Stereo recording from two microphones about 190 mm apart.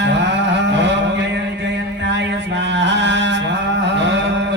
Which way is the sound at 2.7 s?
70° right (ahead or behind).